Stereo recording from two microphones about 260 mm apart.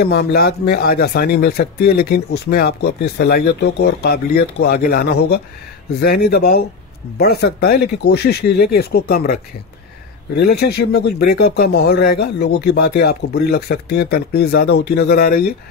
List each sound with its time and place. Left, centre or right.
0.0 s speech: left